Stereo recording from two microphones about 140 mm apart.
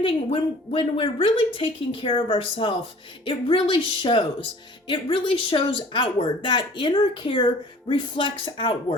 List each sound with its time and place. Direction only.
0.0 s speech: 40° left (ahead or behind)